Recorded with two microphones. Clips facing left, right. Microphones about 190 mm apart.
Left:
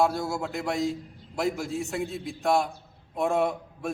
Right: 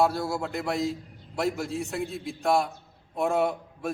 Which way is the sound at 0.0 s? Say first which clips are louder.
Even; centre (ahead or behind).